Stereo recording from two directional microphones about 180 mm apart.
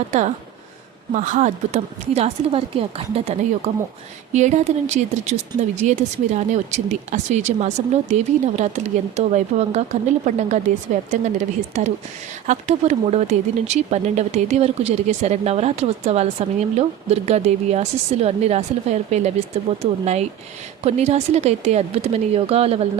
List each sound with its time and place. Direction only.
0.1 s speech: 40° right (ahead or behind)